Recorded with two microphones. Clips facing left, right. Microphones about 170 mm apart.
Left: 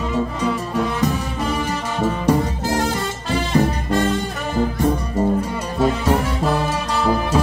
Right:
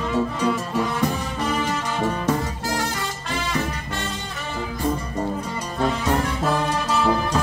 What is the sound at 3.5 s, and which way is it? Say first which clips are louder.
Music: left 12 dB; 40° left (ahead or behind).